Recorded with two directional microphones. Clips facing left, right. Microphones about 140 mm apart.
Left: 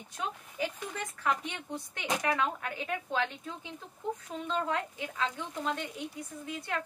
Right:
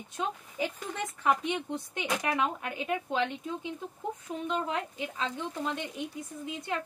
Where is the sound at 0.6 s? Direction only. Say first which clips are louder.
Right 2 dB; 20° right (ahead or behind).